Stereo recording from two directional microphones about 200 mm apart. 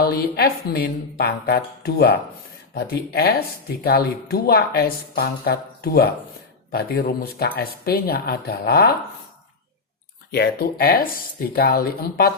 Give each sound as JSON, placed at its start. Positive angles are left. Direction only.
{"t": 0.0, "sound": "speech", "side_deg": 50}
{"t": 10.3, "sound": "speech", "side_deg": 55}